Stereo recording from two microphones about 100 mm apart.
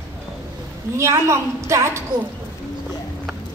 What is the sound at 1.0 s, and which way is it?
A woman's voice, 30° right (ahead or behind).